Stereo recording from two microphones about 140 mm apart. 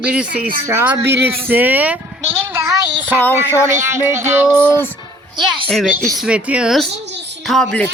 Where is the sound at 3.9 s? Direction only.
20° right (ahead or behind).